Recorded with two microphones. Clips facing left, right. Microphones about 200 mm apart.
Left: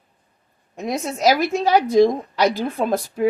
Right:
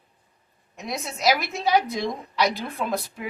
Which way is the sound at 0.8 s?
45° left (ahead or behind).